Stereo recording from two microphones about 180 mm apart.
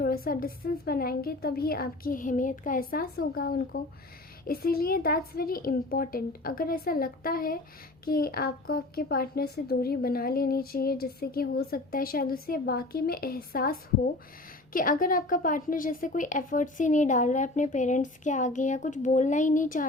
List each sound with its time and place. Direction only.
0.0 s a woman's voice: 50° left (ahead or behind)